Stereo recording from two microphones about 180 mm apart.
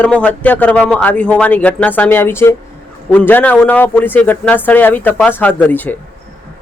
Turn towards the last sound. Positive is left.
turn(degrees=10)  # may be behind; listen again after turning